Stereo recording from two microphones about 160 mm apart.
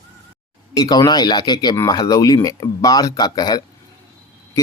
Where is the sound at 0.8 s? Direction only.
25° left (ahead or behind).